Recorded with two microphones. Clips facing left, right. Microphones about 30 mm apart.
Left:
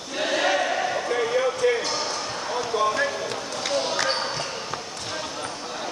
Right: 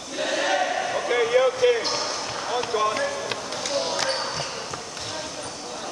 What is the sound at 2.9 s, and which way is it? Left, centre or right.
Music, centre.